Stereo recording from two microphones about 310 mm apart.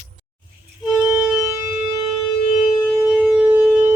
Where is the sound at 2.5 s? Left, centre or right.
Left.